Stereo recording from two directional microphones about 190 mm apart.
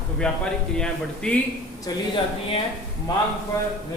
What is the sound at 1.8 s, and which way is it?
Speech, 25° left (ahead or behind).